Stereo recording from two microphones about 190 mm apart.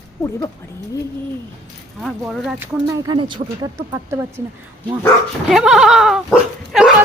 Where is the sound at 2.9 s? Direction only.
20° right (ahead or behind).